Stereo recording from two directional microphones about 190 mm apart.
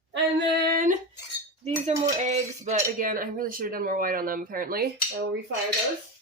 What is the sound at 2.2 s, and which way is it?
Speech, 35° right (ahead or behind).